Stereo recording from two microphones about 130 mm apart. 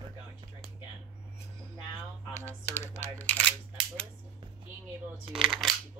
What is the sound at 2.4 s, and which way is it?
Camera, 15° left (ahead or behind).